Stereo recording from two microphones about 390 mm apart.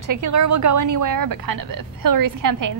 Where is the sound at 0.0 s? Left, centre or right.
Right.